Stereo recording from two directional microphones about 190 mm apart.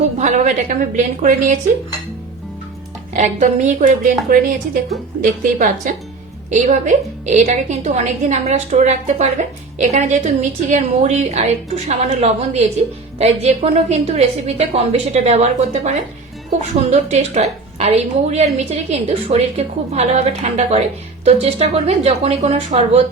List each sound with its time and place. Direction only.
0.2 s a woman's voice: 40° right (ahead or behind)
3.1 s a woman's voice: 40° right (ahead or behind)
16.9 s a woman's voice: 35° right (ahead or behind)